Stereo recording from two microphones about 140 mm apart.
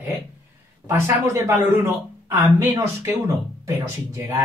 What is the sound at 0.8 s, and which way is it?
Speech, 20° right (ahead or behind).